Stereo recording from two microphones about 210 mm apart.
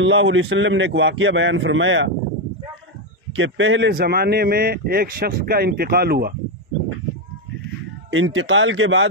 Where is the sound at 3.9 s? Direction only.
45° right (ahead or behind).